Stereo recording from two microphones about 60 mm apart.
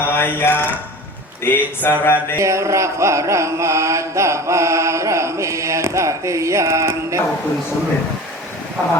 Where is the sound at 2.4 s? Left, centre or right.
Right.